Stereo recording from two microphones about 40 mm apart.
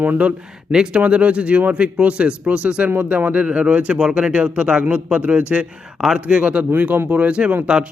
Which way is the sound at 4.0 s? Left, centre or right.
Right.